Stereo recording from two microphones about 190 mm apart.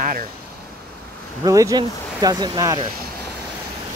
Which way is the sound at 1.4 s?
20° right (ahead or behind).